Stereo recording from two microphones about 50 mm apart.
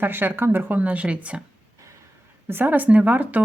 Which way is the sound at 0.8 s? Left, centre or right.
Right.